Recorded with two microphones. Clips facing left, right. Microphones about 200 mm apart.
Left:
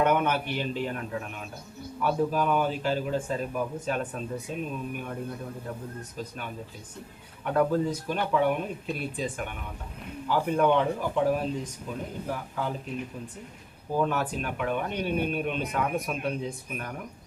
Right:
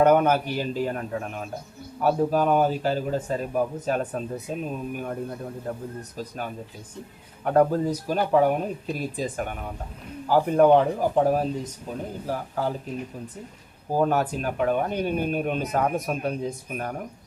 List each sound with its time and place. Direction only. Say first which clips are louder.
0.0 s speech: right 6 dB; 40° right (ahead or behind)
13.9 s speech: right 4 dB; 40° right (ahead or behind)